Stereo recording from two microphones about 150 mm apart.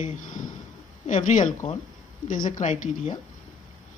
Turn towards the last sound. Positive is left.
turn(degrees=50)  # may be behind; listen again after turning